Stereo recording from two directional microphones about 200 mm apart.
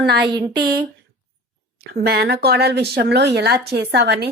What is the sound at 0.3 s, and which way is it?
Speech, 20° right (ahead or behind).